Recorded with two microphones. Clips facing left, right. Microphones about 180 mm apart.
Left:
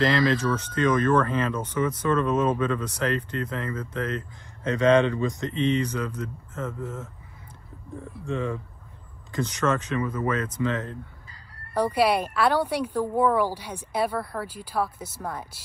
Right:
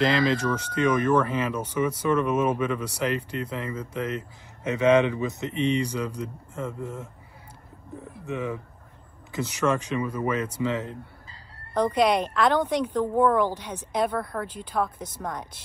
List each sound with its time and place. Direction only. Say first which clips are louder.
0.0 s speech: even; 25° right (ahead or behind)
0.4 s speech: even; 10° right (ahead or behind)
8.3 s speech: left 1 dB; 15° right (ahead or behind)
11.7 s a woman's voice: right 1 dB; 10° left (ahead or behind)